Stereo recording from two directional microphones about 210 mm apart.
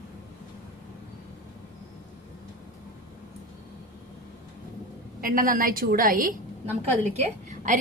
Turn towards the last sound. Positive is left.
turn(degrees=-35)  # may be behind; listen again after turning